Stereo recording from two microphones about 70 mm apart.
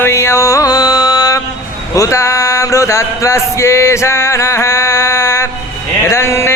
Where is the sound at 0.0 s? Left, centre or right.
Left.